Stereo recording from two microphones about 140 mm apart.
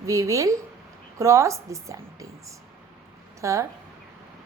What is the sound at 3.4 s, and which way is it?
Speech, 20° right (ahead or behind).